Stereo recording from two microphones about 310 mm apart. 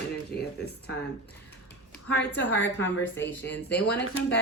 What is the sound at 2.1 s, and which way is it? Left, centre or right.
A woman's voice, left.